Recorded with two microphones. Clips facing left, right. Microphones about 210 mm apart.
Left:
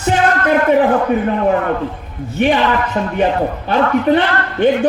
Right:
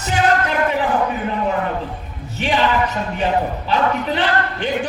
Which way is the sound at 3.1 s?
55° left (ahead or behind).